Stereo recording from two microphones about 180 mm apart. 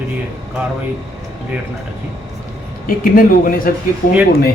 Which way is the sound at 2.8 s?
50° left (ahead or behind).